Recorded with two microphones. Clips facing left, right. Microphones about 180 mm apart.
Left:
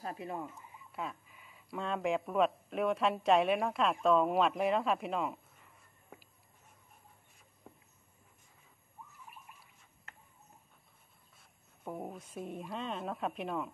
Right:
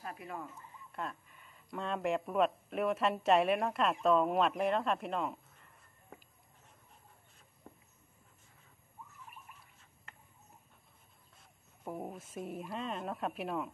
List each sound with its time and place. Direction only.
0.0 s speech: 25° left (ahead or behind)
0.6 s speech: 5° left (ahead or behind)
7.7 s a sound: 10° left (ahead or behind)
11.8 s speech: centre (ahead or behind)